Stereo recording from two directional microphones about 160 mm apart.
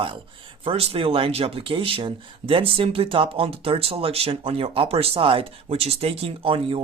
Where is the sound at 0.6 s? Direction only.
35° right (ahead or behind).